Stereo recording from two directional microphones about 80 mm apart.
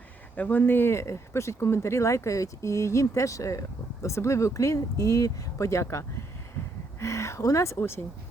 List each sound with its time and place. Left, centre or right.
0.3 s speech: left